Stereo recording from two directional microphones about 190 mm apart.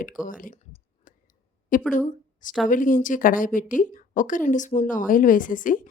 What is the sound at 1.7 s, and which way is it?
Speech, 45° left (ahead or behind).